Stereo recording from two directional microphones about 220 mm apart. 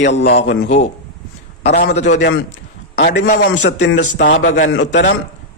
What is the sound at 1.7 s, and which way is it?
Speech, 35° left (ahead or behind).